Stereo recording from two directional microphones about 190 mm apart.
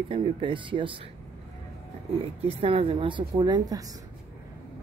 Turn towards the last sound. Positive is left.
turn(degrees=-20)  # may be behind; listen again after turning